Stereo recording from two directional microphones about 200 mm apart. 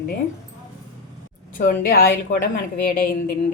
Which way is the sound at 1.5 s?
45° left (ahead or behind).